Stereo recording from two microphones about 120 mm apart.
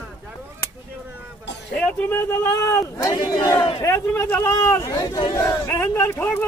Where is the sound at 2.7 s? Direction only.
20° left (ahead or behind).